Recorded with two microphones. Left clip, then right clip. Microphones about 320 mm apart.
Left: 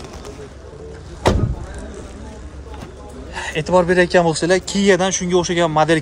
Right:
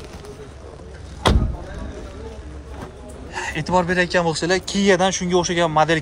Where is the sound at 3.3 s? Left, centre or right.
Centre.